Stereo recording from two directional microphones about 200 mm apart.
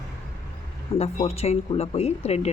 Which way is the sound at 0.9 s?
30° left (ahead or behind).